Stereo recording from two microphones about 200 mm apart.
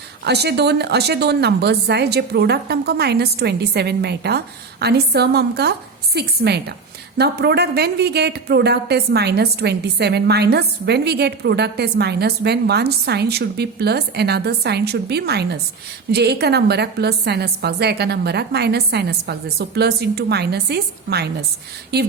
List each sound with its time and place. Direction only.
0.3 s a woman's voice: 55° right (ahead or behind)